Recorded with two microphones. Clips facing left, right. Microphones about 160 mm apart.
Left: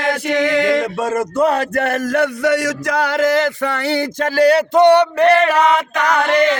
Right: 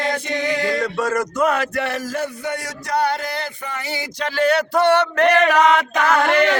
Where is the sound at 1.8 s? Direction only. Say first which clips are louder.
Left 6 dB; 65° left (ahead or behind); by 3.7 s 90° left.